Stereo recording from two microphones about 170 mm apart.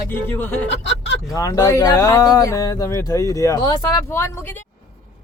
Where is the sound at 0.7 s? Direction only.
90° left.